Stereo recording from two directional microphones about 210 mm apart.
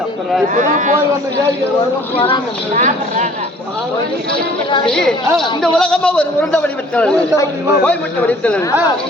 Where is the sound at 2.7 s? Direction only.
35° right (ahead or behind).